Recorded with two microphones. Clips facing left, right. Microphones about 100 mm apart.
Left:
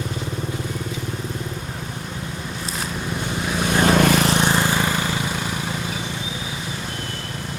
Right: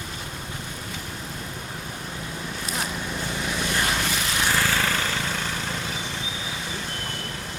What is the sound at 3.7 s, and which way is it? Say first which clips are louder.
Vehicle: left 13 dB; 55° left (ahead or behind).